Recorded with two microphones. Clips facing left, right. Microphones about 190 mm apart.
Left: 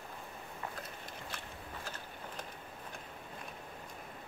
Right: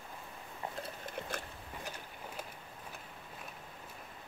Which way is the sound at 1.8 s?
15° right (ahead or behind).